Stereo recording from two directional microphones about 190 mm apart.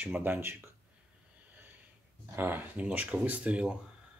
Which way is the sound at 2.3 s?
10° right (ahead or behind).